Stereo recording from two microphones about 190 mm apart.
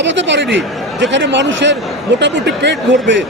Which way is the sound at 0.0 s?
70° right (ahead or behind).